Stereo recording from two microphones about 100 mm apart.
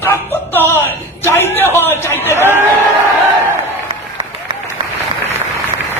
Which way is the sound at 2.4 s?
25° right (ahead or behind).